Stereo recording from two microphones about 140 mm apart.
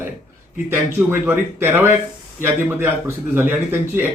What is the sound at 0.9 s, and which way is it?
Speech, 15° right (ahead or behind).